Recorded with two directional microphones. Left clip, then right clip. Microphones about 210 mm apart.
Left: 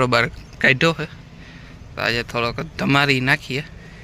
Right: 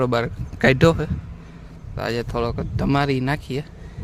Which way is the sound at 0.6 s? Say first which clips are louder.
Even; 25° right (ahead or behind).